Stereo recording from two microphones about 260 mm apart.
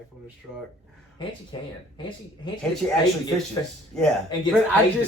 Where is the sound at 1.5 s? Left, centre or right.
Centre.